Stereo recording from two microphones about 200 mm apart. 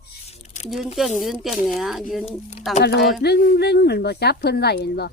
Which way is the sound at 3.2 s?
50° left (ahead or behind).